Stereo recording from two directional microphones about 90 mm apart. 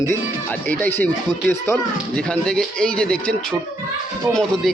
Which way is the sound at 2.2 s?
10° left (ahead or behind).